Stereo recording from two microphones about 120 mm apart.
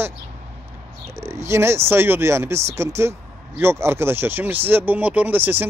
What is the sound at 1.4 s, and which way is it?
Speech, 20° right (ahead or behind).